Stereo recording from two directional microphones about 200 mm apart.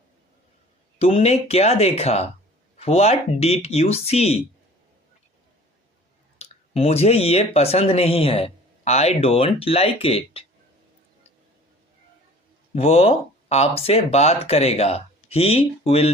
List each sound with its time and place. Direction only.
0.9 s speech: 30° left (ahead or behind)
6.4 s speech: 30° left (ahead or behind)
12.7 s speech: 30° left (ahead or behind)